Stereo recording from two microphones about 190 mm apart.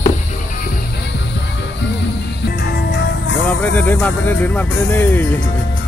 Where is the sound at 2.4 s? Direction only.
60° left (ahead or behind).